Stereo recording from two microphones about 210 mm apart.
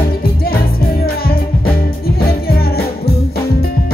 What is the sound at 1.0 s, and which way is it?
Music, 45° left (ahead or behind).